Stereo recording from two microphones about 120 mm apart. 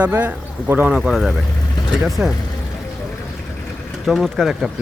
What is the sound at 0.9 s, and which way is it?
Speech, 5° right (ahead or behind).